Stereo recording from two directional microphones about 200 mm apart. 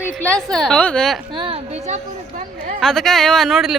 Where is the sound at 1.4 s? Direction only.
30° right (ahead or behind).